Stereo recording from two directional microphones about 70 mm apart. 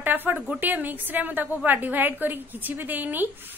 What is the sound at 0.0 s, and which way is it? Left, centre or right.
A woman's voice, right.